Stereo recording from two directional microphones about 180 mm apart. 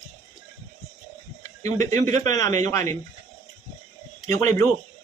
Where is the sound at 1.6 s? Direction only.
15° left (ahead or behind).